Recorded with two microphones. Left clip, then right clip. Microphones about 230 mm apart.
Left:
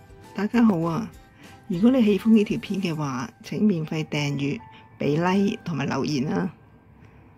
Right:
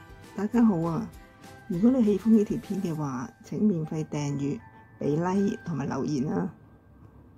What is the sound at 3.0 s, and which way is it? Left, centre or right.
Speech, centre.